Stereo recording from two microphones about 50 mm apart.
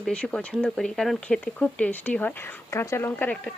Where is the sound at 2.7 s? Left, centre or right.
Left.